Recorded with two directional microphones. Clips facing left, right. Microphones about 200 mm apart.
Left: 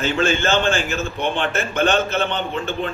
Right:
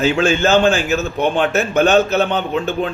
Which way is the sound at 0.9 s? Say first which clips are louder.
Right 6 dB; 40° right (ahead or behind).